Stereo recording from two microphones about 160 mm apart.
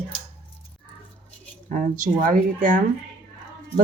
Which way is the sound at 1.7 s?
55° right (ahead or behind).